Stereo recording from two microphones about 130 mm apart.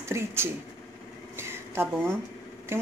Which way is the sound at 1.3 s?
20° right (ahead or behind).